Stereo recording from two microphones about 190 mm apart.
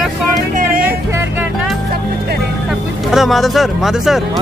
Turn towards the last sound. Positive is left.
turn(degrees=0)  # may be behind; listen again after turning